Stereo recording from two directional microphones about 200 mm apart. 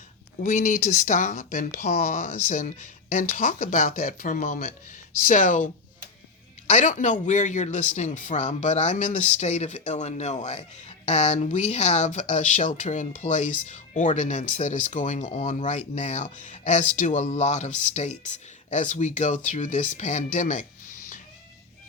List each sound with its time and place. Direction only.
0.4 s speech: 40° left (ahead or behind)
6.7 s speech: 35° left (ahead or behind)